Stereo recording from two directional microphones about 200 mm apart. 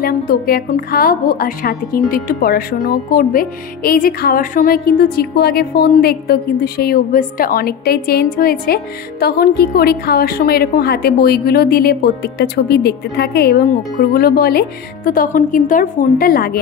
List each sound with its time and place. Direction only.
0.0 s speech: 50° left (ahead or behind)